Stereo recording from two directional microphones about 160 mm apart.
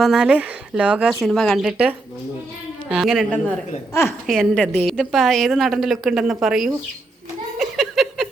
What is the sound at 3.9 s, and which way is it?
Speech, 15° left (ahead or behind).